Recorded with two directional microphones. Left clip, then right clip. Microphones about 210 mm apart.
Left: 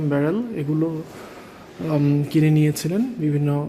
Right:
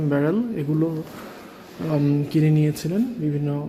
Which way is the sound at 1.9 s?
10° left (ahead or behind).